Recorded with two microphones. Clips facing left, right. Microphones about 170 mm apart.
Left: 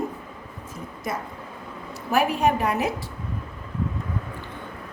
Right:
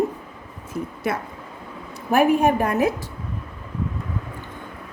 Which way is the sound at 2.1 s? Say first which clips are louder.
Right 4 dB; 55° right (ahead or behind).